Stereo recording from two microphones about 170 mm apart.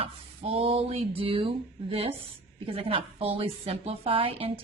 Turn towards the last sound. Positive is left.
turn(degrees=-35)  # may be behind; listen again after turning